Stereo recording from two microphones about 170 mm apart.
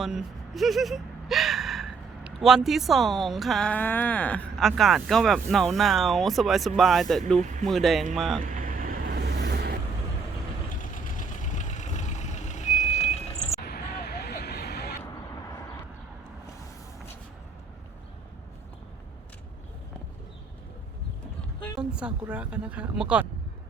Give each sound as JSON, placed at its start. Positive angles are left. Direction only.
{"t": 0.0, "sound": "speech", "side_deg": 0}
{"t": 8.4, "sound": "vehicle", "side_deg": -55}
{"t": 9.4, "sound": "vehicle", "side_deg": -75}
{"t": 10.8, "sound": "vehicle", "side_deg": 50}
{"t": 13.7, "sound": "vehicle", "side_deg": 70}
{"t": 21.8, "sound": "speech", "side_deg": -5}